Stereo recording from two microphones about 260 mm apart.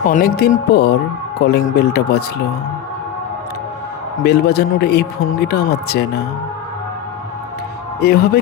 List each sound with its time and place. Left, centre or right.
0.0 s a man's voice: left
4.2 s a man's voice: left
8.0 s a man's voice: left